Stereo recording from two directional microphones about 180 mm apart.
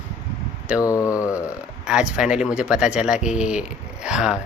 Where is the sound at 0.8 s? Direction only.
20° left (ahead or behind).